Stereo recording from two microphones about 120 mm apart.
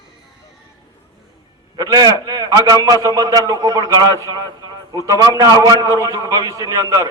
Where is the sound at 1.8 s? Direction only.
30° right (ahead or behind).